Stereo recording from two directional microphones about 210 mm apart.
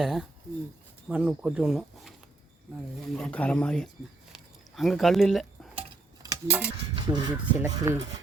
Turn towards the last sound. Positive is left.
turn(degrees=-20)  # may be behind; listen again after turning